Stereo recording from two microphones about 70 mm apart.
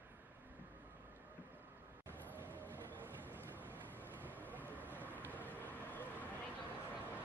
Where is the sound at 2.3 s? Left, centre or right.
Right.